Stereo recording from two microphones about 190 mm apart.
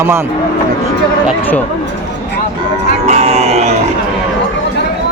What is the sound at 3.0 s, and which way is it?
Music, 35° right (ahead or behind).